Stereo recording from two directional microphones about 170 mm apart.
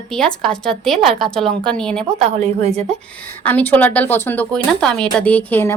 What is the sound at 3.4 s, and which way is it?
Speech, 10° left (ahead or behind).